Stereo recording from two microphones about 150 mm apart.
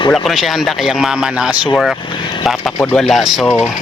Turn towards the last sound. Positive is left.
turn(degrees=5)  # may be behind; listen again after turning